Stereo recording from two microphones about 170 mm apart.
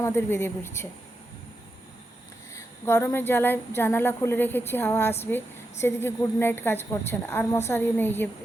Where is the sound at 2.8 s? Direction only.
15° left (ahead or behind).